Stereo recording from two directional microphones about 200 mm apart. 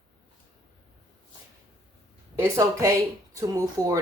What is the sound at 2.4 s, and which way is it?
Speech, 15° right (ahead or behind).